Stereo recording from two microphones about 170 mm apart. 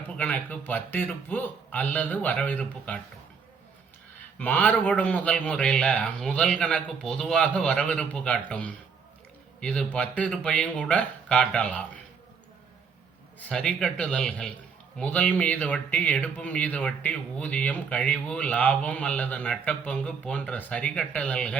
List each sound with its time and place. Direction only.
0.2 s speech: 10° left (ahead or behind)
4.4 s speech: 10° left (ahead or behind)
13.4 s a man's voice: 5° left (ahead or behind)